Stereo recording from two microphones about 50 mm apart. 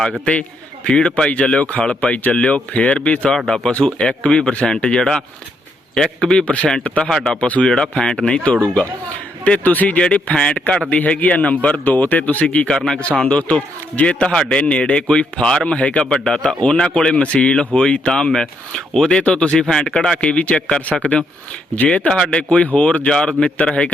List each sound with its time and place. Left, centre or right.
0.9 s a man's voice: left
3.3 s speech: centre
3.7 s speech: left
7.3 s a man's voice: left
7.7 s a man's voice: centre
11.2 s a man's voice: left
12.7 s speech: centre
13.0 s a man's voice: left